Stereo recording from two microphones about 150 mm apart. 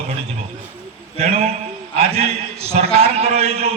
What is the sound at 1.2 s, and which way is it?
A man's voice, 45° right (ahead or behind).